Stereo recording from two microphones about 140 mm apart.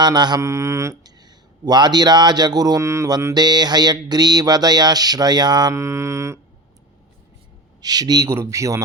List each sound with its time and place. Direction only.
0.0 s speech: 30° right (ahead or behind)
7.8 s speech: 30° right (ahead or behind)